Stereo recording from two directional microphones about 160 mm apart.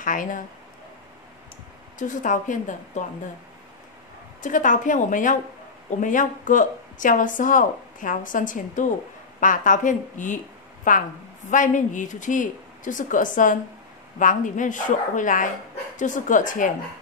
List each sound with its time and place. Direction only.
0.0 s speech: 55° left (ahead or behind)
2.0 s a woman's voice: 50° left (ahead or behind)
4.4 s a woman's voice: 55° left (ahead or behind)